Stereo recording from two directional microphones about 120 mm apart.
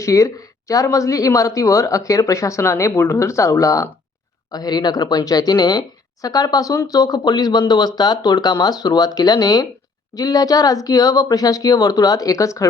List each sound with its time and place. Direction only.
0.0 s speech: 25° left (ahead or behind)